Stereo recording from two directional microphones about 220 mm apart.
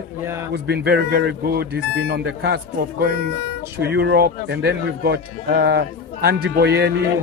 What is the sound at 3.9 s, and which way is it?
Speech, 50° right (ahead or behind).